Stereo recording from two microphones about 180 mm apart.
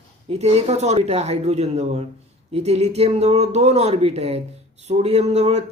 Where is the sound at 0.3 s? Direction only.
35° right (ahead or behind).